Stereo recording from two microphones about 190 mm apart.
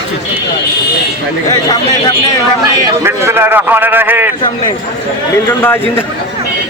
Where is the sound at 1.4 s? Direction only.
20° left (ahead or behind).